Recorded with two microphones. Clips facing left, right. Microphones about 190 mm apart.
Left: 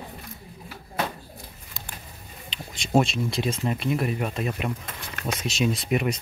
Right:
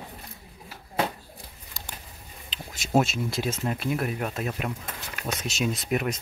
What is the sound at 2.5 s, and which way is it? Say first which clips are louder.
Speech: left 2 dB; 5° right (ahead or behind).